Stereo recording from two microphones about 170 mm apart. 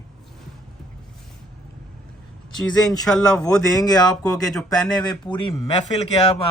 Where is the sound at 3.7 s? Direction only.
20° left (ahead or behind).